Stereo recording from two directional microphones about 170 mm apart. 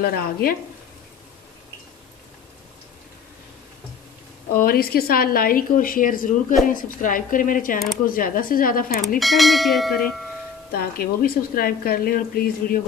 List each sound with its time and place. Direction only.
0.0 s a woman's voice: 60° left (ahead or behind)
4.6 s a woman's voice: 60° left (ahead or behind)
9.2 s speech: centre (ahead or behind)
10.7 s a woman's voice: 60° left (ahead or behind)